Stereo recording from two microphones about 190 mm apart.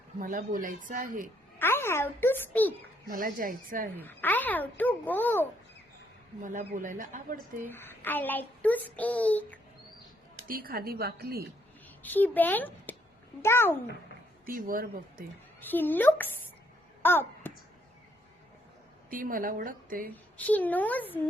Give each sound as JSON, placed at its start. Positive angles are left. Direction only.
{"t": 0.2, "sound": "speech", "side_deg": -45}
{"t": 1.5, "sound": "a child's voice", "side_deg": 10}
{"t": 3.1, "sound": "speech", "side_deg": -45}
{"t": 3.9, "sound": "a woman's voice", "side_deg": 10}
{"t": 6.4, "sound": "speech", "side_deg": -45}
{"t": 7.7, "sound": "a woman's voice", "side_deg": 10}
{"t": 10.5, "sound": "speech", "side_deg": -50}
{"t": 12.0, "sound": "a woman's voice", "side_deg": 10}
{"t": 14.4, "sound": "speech", "side_deg": -50}
{"t": 15.7, "sound": "a woman's voice", "side_deg": 10}
{"t": 17.0, "sound": "a sound", "side_deg": 10}
{"t": 19.1, "sound": "speech", "side_deg": -45}
{"t": 20.3, "sound": "a woman's voice", "side_deg": 10}